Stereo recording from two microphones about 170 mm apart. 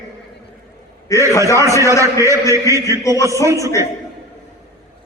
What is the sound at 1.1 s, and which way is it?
Speech, 20° left (ahead or behind).